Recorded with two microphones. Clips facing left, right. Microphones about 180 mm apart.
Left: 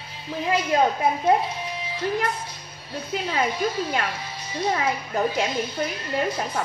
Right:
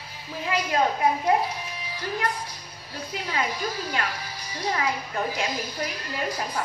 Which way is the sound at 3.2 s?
25° left (ahead or behind).